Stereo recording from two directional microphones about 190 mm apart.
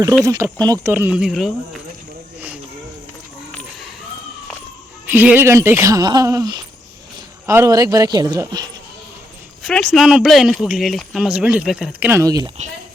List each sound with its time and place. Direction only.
0.3 s speech: 15° right (ahead or behind); by 1.8 s centre (ahead or behind)
5.1 s a man's voice: 10° right (ahead or behind)
9.6 s speech: 5° left (ahead or behind); by 12.5 s 20° right (ahead or behind)